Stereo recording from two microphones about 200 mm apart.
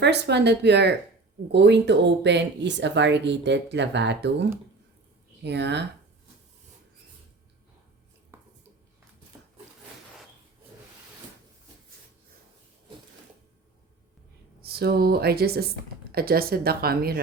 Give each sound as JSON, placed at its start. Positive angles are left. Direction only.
{"t": 0.0, "sound": "speech", "side_deg": -60}
{"t": 14.6, "sound": "speech", "side_deg": -50}